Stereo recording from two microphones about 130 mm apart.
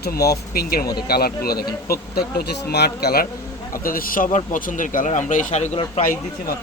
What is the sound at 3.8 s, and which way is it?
Speech, 90° left.